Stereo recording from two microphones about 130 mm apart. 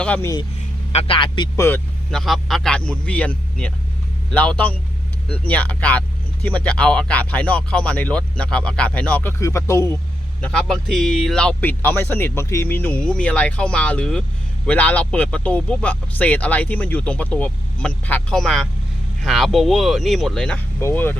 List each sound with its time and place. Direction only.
0.9 s speech: 45° left (ahead or behind)
1.5 s speech: 20° left (ahead or behind)
2.0 s speech: centre (ahead or behind)
9.4 s speech: 25° left (ahead or behind)
10.4 s speech: 5° left (ahead or behind)
20.7 s speech: 15° left (ahead or behind)